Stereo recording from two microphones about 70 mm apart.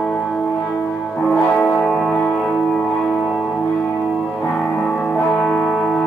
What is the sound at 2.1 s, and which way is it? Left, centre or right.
Music, left.